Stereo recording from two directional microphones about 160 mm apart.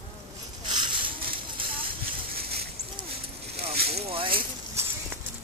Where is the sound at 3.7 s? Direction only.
75° right (ahead or behind).